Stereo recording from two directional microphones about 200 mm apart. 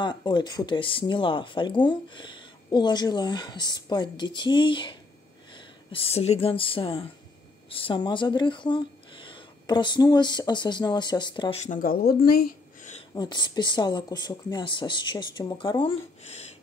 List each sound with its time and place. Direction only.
0.0 s speech: 20° left (ahead or behind)
11.6 s speech: 40° left (ahead or behind)
13.1 s speech: 20° left (ahead or behind)